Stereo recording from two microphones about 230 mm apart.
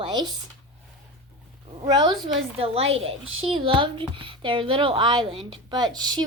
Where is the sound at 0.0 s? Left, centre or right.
Centre.